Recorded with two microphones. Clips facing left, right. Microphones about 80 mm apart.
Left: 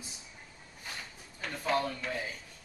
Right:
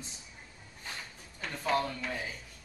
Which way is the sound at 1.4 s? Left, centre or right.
Centre.